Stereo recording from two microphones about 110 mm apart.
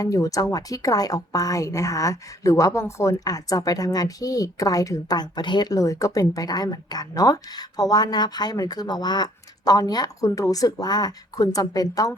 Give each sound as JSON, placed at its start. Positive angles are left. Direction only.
{"t": 0.0, "sound": "speech", "side_deg": 30}